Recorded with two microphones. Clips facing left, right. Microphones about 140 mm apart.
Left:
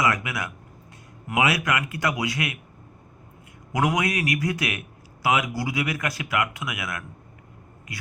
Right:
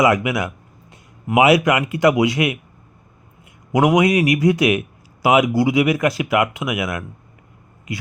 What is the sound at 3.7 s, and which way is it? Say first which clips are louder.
Speech: right 9 dB; 20° right (ahead or behind).